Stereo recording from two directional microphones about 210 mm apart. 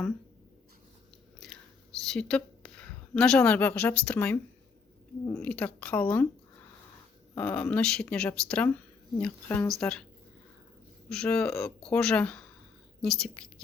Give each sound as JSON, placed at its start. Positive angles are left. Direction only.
{"t": 1.4, "sound": "whispering", "side_deg": 0}
{"t": 2.1, "sound": "a woman's voice", "side_deg": 5}
{"t": 7.3, "sound": "speech", "side_deg": 5}
{"t": 11.1, "sound": "speech", "side_deg": 5}